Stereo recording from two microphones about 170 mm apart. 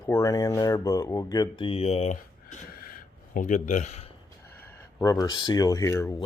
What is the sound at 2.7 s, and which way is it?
Gasp, 60° left (ahead or behind).